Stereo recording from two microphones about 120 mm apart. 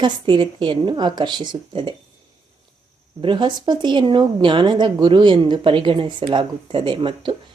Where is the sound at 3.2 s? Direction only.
40° right (ahead or behind).